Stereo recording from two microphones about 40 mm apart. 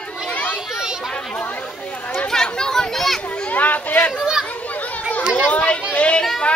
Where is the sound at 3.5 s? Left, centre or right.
Left.